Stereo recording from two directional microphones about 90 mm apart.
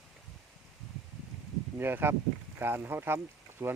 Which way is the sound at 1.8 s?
25° right (ahead or behind).